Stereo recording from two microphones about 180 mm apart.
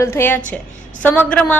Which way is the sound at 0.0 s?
15° left (ahead or behind).